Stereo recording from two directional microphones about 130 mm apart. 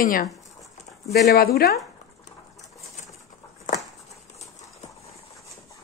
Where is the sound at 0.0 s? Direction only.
90° left.